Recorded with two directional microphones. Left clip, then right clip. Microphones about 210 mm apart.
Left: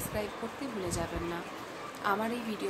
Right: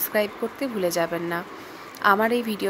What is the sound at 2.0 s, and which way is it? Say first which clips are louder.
Speech: right 12 dB; 45° right (ahead or behind).